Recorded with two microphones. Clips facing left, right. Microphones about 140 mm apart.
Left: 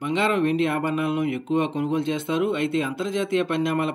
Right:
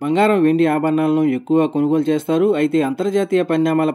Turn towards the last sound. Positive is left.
turn(degrees=-40)  # may be behind; listen again after turning